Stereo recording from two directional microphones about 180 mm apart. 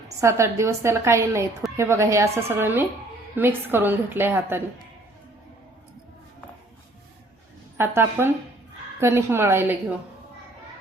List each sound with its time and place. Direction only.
0.2 s a woman's voice: 15° right (ahead or behind)
7.8 s a woman's voice: 15° right (ahead or behind)